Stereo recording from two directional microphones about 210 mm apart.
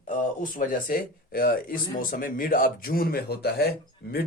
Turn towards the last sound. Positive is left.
turn(degrees=45)  # may be behind; listen again after turning